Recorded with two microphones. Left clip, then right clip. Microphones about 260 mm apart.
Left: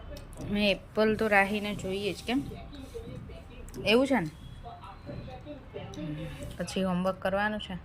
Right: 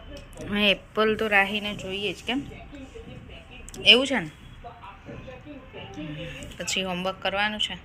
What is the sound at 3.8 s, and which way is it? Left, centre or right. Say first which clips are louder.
Speech: right 7 dB; centre.